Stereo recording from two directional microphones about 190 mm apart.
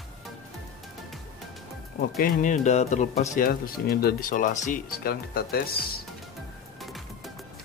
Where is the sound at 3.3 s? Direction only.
50° left (ahead or behind).